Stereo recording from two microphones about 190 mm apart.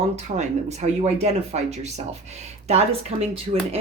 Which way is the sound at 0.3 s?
35° right (ahead or behind).